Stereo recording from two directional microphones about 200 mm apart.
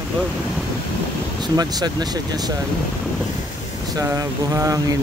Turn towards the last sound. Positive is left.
turn(degrees=-15)  # may be behind; listen again after turning